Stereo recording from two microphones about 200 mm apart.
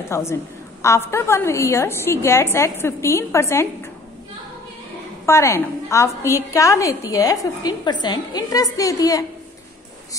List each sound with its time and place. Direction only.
0.1 s a woman's voice: 15° left (ahead or behind)
5.2 s a woman's voice: 15° left (ahead or behind)